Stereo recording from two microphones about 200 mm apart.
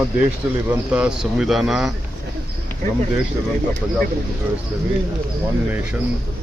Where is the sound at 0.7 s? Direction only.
5° right (ahead or behind).